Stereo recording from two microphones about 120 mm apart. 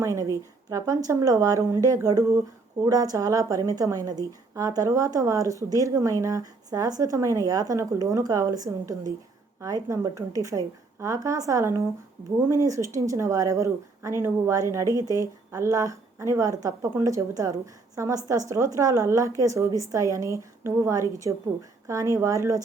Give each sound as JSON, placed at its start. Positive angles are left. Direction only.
{"t": 0.0, "sound": "a woman's voice", "side_deg": -25}